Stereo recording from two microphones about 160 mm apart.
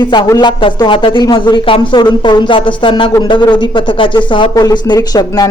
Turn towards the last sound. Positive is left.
turn(degrees=20)  # may be behind; listen again after turning